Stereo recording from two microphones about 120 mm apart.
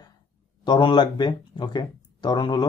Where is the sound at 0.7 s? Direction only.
40° left (ahead or behind).